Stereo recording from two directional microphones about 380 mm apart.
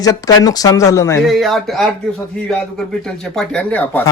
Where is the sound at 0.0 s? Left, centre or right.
Centre.